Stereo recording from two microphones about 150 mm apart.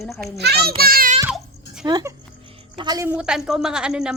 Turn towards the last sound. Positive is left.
turn(degrees=-5)  # may be behind; listen again after turning